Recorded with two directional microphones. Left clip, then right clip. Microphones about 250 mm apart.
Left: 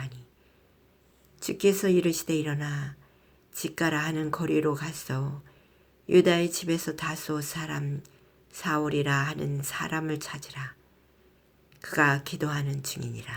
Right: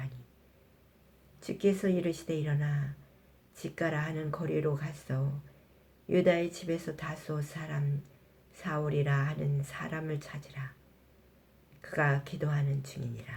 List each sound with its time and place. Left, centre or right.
1.4 s speech: left
11.8 s speech: left